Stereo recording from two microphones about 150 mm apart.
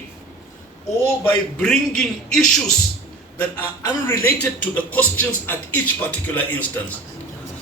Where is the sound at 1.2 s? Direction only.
5° left (ahead or behind).